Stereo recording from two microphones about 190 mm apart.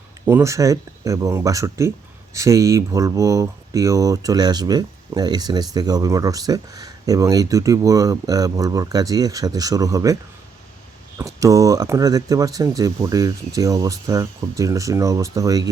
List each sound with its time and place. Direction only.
0.3 s speech: 15° right (ahead or behind)
11.2 s speech: 15° right (ahead or behind)